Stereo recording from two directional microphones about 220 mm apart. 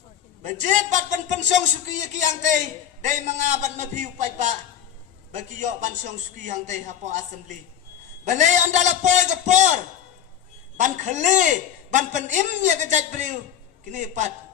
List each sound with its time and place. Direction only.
0.4 s a man's voice: 35° right (ahead or behind)
10.8 s a man's voice: 35° right (ahead or behind)